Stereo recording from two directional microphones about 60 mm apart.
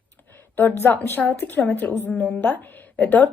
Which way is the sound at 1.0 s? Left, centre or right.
Left.